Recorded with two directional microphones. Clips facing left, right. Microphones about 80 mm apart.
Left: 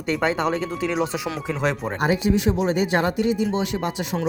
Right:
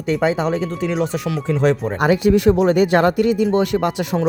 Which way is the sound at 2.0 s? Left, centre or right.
Right.